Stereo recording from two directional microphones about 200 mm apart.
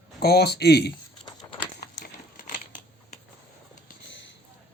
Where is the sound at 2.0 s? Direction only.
45° left (ahead or behind).